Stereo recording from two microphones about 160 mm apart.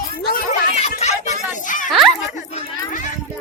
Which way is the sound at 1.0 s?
45° left (ahead or behind).